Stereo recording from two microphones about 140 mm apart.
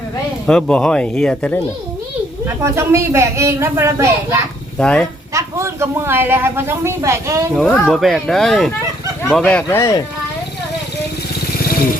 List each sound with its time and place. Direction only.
0.4 s speech: 5° left (ahead or behind)
2.5 s speech: 20° right (ahead or behind)
4.8 s speech: 5° left (ahead or behind)
5.3 s a woman's voice: 20° right (ahead or behind)
7.5 s speech: 5° left (ahead or behind)
9.6 s speech: 20° left (ahead or behind)